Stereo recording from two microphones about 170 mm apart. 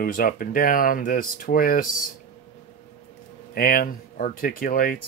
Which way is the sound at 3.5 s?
60° left (ahead or behind).